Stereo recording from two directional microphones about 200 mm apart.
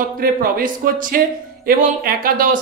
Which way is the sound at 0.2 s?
45° right (ahead or behind).